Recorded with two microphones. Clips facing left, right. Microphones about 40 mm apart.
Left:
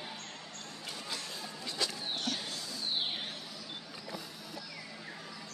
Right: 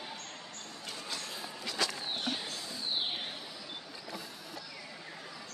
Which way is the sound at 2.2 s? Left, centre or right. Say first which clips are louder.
Right 1 dB; centre.